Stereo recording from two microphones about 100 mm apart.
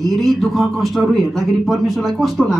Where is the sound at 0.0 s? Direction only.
Centre (ahead or behind).